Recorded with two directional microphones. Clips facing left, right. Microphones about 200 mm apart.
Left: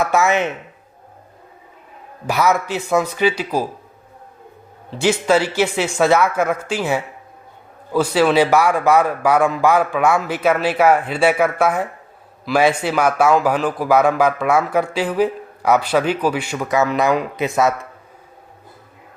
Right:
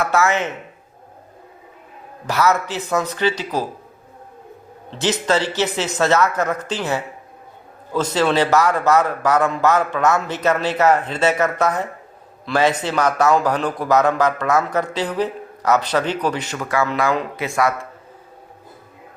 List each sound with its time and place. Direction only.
0.0 s speech: 15° left (ahead or behind)
2.2 s speech: 15° left (ahead or behind)
4.9 s speech: 10° left (ahead or behind)